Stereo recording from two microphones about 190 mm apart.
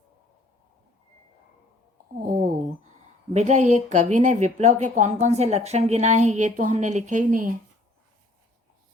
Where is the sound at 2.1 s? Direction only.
45° right (ahead or behind).